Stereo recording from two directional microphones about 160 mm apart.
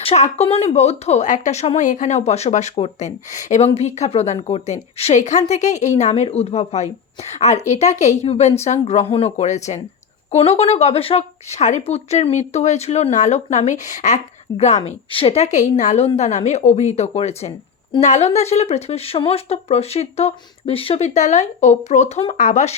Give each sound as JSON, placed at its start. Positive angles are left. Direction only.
{"t": 0.0, "sound": "speech", "side_deg": 40}